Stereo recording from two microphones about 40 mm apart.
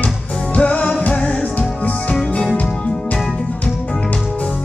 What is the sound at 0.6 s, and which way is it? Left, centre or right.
Music, left.